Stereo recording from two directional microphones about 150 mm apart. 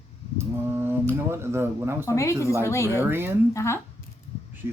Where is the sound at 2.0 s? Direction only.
20° left (ahead or behind).